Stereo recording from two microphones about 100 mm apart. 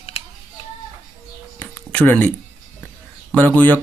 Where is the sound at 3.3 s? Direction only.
15° left (ahead or behind).